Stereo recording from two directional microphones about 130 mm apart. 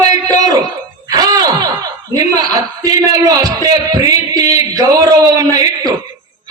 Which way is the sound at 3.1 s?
30° right (ahead or behind).